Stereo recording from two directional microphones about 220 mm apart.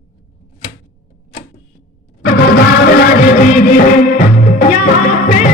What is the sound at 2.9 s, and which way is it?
Music, 40° left (ahead or behind).